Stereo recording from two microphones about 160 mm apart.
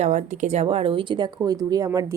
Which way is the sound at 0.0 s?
45° right (ahead or behind).